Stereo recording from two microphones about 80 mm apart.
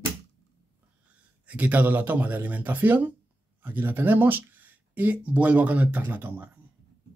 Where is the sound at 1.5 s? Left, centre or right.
Centre.